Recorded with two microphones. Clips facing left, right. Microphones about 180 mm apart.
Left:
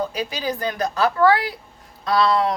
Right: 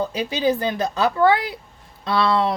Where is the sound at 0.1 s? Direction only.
25° right (ahead or behind).